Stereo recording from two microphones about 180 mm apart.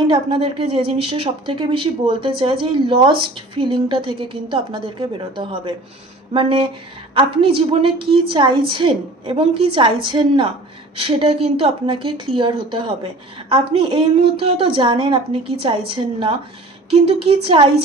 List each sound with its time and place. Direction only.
0.0 s a woman's voice: 30° right (ahead or behind)